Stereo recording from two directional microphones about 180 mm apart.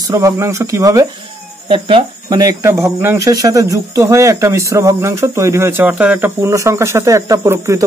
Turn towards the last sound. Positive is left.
turn(degrees=-15)  # may be behind; listen again after turning